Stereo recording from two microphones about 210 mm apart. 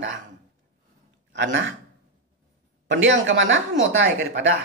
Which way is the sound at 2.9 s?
60° right (ahead or behind).